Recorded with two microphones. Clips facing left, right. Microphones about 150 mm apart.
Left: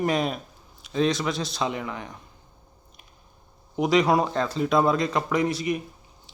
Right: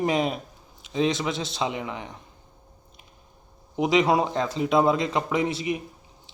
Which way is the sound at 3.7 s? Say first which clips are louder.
Even; 20° right (ahead or behind).